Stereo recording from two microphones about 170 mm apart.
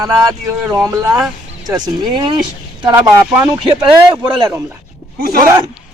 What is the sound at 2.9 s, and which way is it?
Speech, 10° right (ahead or behind).